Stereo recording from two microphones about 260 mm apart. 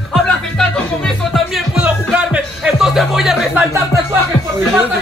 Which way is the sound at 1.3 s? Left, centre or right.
Centre.